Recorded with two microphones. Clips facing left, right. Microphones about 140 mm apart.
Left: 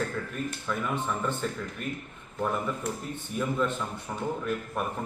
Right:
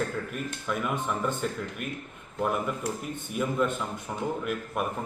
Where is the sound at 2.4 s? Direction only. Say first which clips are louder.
Right 1 dB; 15° right (ahead or behind).